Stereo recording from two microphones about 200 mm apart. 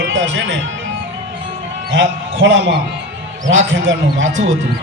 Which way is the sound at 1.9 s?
65° right (ahead or behind).